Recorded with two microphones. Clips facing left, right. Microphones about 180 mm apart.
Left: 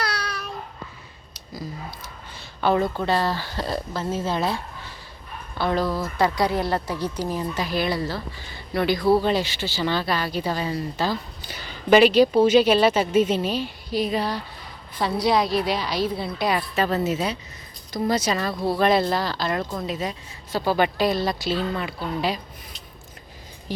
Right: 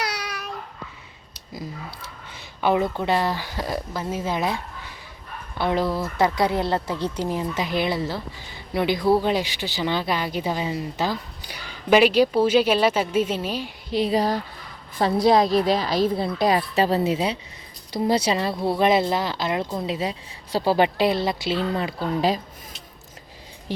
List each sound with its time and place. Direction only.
0.0 s babbling: 15° right (ahead or behind)
2.6 s speech: 15° right (ahead or behind)
13.9 s speech: 25° right (ahead or behind)
14.2 s a woman's voice: 45° right (ahead or behind)
16.6 s speech: 30° right (ahead or behind)